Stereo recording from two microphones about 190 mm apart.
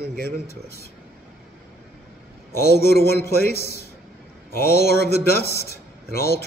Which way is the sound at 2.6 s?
55° left (ahead or behind).